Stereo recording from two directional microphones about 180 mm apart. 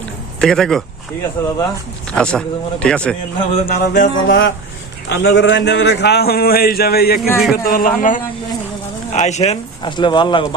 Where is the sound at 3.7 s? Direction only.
55° left (ahead or behind).